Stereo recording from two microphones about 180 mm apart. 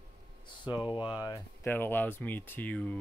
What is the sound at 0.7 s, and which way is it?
Speech, 25° left (ahead or behind).